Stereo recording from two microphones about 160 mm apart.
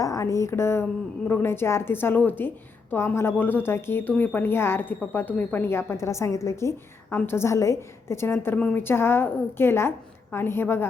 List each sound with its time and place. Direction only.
0.0 s a woman's voice: 20° left (ahead or behind)